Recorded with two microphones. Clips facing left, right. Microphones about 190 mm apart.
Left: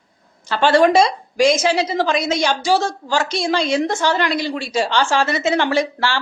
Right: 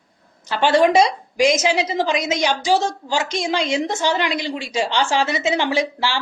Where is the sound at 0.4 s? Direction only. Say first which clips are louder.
Left 2 dB; 15° right (ahead or behind).